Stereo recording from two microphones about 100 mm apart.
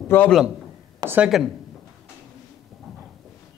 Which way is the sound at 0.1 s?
20° left (ahead or behind).